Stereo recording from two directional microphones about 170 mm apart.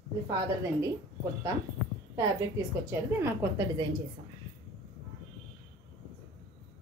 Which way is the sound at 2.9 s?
15° right (ahead or behind).